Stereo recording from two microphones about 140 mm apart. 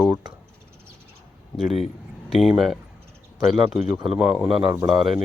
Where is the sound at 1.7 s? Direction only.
45° left (ahead or behind).